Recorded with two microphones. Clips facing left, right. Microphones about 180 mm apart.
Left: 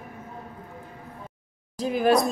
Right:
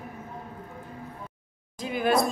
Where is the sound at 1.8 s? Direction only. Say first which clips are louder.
Left 4 dB; 40° left (ahead or behind).